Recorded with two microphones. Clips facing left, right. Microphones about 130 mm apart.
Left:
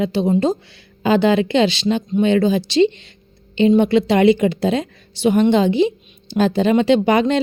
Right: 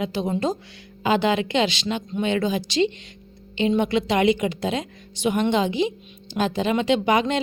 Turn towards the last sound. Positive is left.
turn(degrees=35)  # may be behind; listen again after turning